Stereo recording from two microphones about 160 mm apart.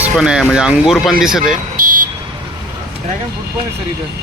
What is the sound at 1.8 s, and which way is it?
Vehicle, 60° right (ahead or behind).